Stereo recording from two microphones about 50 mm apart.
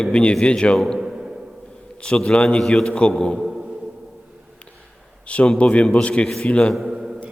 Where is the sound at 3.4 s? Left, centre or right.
Centre.